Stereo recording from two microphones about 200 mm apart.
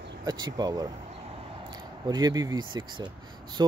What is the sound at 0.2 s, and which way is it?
Speech, 20° right (ahead or behind).